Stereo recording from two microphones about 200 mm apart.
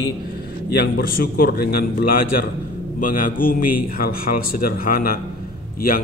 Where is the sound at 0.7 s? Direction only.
50° left (ahead or behind).